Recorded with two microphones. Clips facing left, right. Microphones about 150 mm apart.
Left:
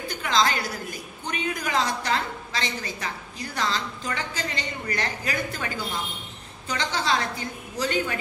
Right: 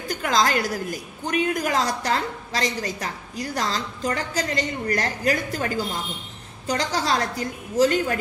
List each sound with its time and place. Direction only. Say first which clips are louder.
0.1 s a woman's voice: right 3 dB; 45° right (ahead or behind)
6.7 s a woman's voice: right 3 dB; 40° right (ahead or behind)